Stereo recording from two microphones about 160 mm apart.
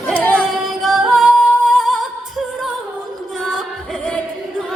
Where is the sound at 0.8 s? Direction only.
Centre (ahead or behind).